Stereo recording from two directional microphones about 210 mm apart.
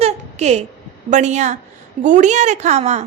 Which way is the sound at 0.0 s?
30° right (ahead or behind).